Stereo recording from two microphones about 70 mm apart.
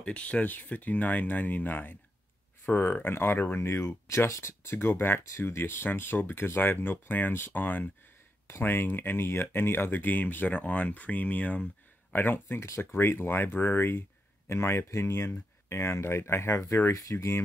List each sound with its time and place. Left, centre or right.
0.0 s speech: centre
12.5 s speech: left